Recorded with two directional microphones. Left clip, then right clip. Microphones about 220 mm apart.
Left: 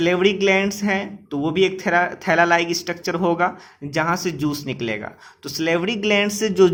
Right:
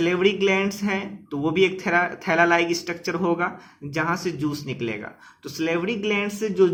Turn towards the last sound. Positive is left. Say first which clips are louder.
# left 4 dB
turn(degrees=25)  # may be behind; listen again after turning